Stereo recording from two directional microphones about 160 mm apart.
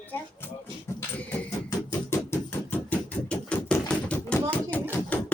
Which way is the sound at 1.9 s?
15° left (ahead or behind).